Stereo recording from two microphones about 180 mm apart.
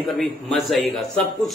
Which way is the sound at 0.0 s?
Centre (ahead or behind).